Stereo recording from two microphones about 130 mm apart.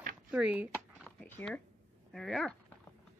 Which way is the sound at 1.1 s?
10° left (ahead or behind).